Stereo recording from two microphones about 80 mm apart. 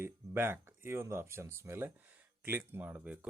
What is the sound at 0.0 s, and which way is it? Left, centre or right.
Speech, right.